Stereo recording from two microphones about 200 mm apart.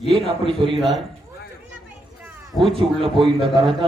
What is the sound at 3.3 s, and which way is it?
Speech, 25° right (ahead or behind).